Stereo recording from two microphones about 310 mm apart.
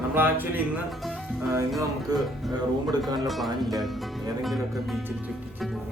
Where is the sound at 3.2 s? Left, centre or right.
Centre.